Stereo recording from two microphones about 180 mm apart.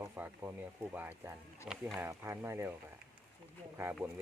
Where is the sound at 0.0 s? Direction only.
10° right (ahead or behind).